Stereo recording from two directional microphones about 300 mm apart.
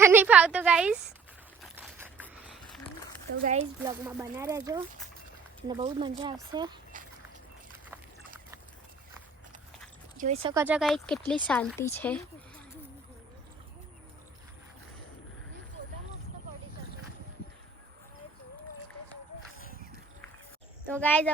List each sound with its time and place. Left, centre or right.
0.0 s a woman's voice: centre
1.7 s a sound: centre
3.3 s speech: right
3.8 s speech: centre
10.2 s speech: right; by 12.2 s centre
20.8 s speech: centre